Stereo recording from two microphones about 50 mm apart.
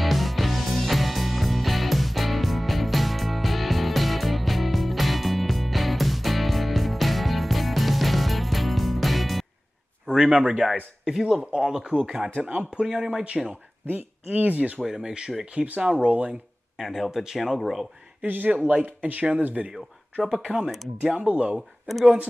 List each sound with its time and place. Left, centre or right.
0.0 s music: centre
10.0 s a sound: centre
10.3 s speech: right
11.1 s speech: centre; by 12.8 s right
12.8 s speech: centre
13.8 s speech: right
14.8 s speech: centre
15.6 s speech: right
16.7 s speech: centre
18.2 s speech: right
20.2 s speech: centre
21.2 s speech: right
21.5 s speech: centre